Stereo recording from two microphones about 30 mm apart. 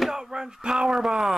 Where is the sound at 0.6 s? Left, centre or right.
Right.